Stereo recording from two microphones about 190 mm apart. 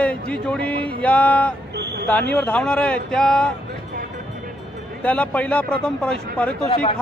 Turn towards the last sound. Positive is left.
turn(degrees=5)  # may be behind; listen again after turning